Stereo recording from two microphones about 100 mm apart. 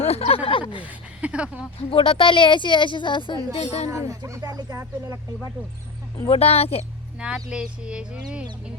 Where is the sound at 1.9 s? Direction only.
65° left (ahead or behind).